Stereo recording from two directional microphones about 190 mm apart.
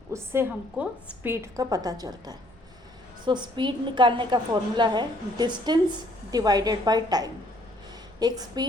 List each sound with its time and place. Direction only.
0.1 s a woman's voice: 10° right (ahead or behind)